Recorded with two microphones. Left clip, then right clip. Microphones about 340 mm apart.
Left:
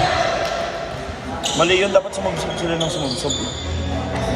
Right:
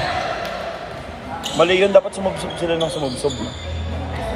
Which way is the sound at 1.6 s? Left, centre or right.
Centre.